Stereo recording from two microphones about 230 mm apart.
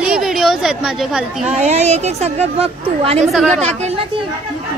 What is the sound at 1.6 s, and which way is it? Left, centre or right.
A woman's voice, right.